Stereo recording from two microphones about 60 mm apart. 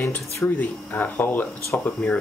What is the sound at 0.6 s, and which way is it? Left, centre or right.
Speech, left.